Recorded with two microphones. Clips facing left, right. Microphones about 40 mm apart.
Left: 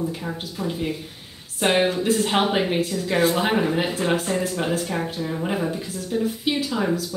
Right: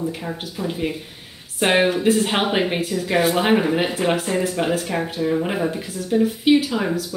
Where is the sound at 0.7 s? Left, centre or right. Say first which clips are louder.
Right 2 dB; centre.